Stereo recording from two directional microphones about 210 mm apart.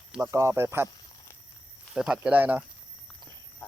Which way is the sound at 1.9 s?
5° right (ahead or behind).